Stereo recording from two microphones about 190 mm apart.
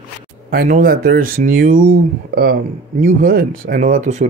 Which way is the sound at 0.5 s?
45° right (ahead or behind).